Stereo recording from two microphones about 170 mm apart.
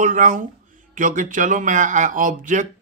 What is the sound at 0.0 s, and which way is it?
Speech, 50° right (ahead or behind).